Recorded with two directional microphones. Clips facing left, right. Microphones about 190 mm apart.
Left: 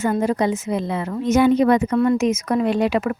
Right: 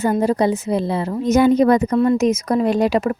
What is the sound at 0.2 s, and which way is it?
A woman's voice, 35° right (ahead or behind).